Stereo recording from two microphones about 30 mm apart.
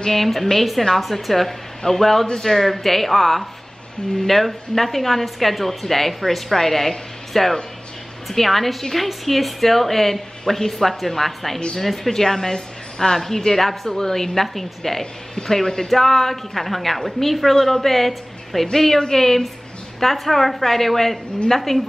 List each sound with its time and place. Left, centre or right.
0.0 s a woman's voice: centre
13.5 s a woman's voice: centre
18.9 s a woman's voice: centre